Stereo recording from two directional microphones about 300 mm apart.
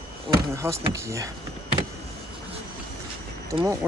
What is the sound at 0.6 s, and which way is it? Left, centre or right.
Speech, centre.